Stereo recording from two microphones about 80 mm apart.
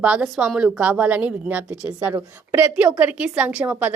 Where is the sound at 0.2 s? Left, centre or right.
Centre.